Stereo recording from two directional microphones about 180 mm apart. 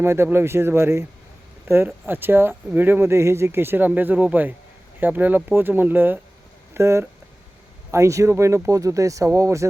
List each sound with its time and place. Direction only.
0.0 s speech: 15° right (ahead or behind)